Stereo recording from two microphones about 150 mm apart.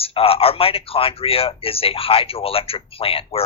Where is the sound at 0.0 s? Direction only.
40° left (ahead or behind).